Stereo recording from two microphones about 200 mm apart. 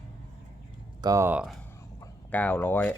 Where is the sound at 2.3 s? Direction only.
10° left (ahead or behind).